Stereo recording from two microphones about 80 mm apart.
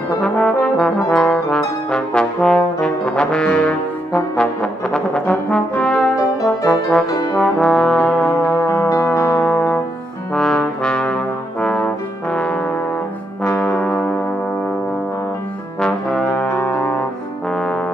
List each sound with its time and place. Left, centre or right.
0.2 s trombone: centre
5.5 s brass instrument: centre
8.5 s brass instrument: left
8.8 s music: left
9.5 s brass instrument: left
10.3 s trombone: centre
11.6 s brass instrument: centre
15.8 s brass instrument: centre